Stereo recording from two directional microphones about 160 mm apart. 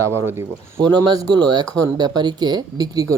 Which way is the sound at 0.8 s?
25° right (ahead or behind).